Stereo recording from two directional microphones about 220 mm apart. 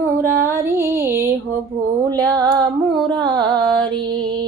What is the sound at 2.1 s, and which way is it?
Speech, 15° right (ahead or behind).